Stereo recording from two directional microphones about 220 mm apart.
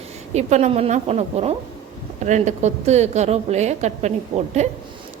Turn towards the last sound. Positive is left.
turn(degrees=-30)  # may be behind; listen again after turning